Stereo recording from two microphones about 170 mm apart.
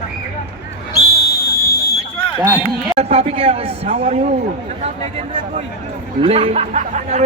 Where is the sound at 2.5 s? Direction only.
15° right (ahead or behind).